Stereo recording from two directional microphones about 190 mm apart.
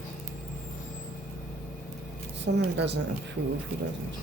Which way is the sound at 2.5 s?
65° right (ahead or behind).